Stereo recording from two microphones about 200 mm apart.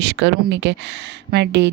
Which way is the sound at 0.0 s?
60° right (ahead or behind).